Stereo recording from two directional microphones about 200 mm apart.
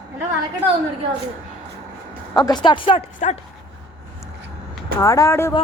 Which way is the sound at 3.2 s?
35° left (ahead or behind).